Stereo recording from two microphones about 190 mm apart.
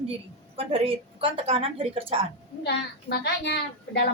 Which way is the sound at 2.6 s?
60° left (ahead or behind).